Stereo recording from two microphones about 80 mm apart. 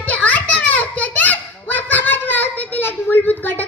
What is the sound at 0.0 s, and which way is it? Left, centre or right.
Children playing, centre.